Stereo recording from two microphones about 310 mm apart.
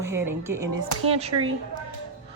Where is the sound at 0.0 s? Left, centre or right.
Centre.